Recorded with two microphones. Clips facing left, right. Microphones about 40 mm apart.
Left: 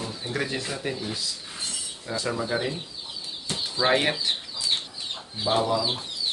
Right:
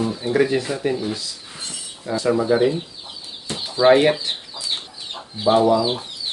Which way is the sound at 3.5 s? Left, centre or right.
Centre.